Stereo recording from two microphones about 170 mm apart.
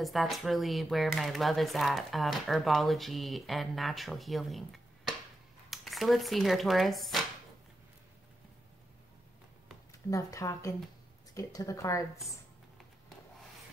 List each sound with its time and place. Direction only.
0.0 s speech: centre (ahead or behind)
5.7 s speech: centre (ahead or behind)
10.0 s speech: 20° left (ahead or behind)